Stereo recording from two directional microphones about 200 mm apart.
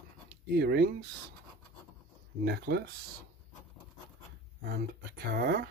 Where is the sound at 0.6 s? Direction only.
55° right (ahead or behind).